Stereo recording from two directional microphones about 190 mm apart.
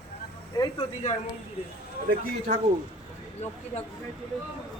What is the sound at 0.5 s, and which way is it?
Speech, 20° left (ahead or behind).